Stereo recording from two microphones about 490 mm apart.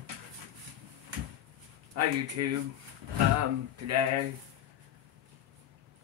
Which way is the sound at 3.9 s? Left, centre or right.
Right.